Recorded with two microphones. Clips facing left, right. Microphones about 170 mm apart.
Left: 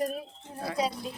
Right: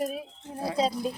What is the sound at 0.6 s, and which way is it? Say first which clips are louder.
Speech: right 3 dB; 25° right (ahead or behind).